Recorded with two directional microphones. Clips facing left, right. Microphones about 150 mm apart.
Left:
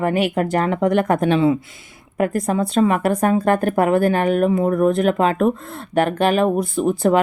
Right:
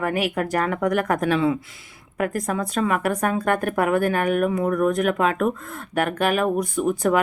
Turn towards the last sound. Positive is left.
turn(degrees=30)  # may be behind; listen again after turning